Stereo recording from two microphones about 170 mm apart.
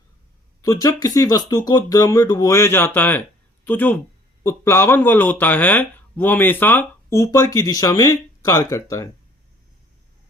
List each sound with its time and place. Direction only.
0.6 s speech: 20° left (ahead or behind)